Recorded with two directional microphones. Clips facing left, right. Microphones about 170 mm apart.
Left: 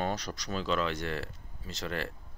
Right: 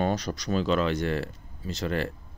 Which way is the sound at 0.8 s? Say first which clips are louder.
Right 6 dB; 45° right (ahead or behind).